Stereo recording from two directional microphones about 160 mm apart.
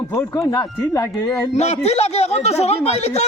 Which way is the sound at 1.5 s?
45° left (ahead or behind).